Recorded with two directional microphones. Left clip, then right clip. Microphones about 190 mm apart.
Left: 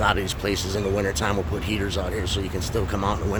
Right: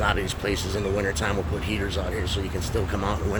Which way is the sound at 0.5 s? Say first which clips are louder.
Left 2 dB; 90° left.